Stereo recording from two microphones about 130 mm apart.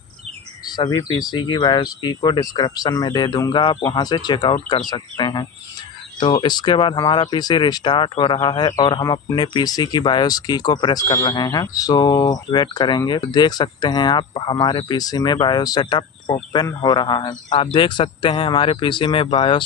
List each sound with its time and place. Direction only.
0.7 s speech: 30° left (ahead or behind)